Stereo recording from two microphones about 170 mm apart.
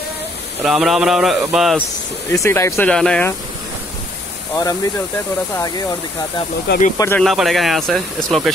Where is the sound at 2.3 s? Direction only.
15° left (ahead or behind).